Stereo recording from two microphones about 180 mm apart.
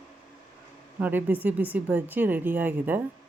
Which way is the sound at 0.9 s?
10° right (ahead or behind).